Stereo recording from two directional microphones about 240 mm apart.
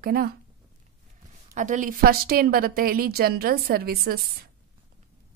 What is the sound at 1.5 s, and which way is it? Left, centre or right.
A woman's voice, right.